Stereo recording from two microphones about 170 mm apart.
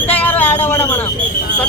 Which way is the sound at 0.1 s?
10° left (ahead or behind).